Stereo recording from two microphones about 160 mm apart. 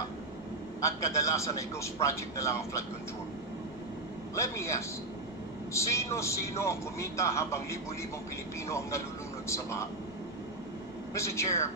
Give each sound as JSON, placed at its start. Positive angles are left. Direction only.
{"t": 0.7, "sound": "a man's voice", "side_deg": 20}
{"t": 4.4, "sound": "a man's voice", "side_deg": 15}
{"t": 11.1, "sound": "a man's voice", "side_deg": 15}